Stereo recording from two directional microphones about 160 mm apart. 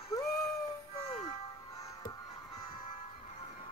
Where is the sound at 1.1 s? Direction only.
40° left (ahead or behind).